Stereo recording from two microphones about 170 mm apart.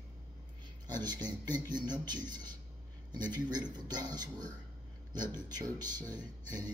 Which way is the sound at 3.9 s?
25° right (ahead or behind).